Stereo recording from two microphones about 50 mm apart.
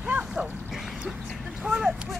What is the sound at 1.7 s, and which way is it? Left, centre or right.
Speech, centre.